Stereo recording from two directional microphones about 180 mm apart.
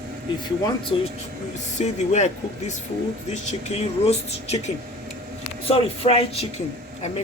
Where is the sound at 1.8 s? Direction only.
40° left (ahead or behind).